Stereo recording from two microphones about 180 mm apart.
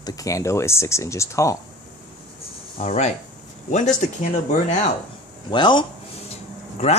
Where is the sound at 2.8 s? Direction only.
35° left (ahead or behind).